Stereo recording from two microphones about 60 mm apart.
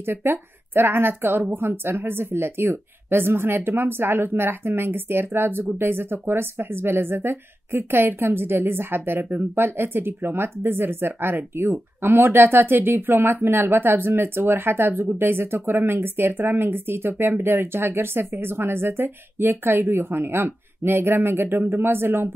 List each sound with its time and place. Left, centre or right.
0.0 s a woman's voice: right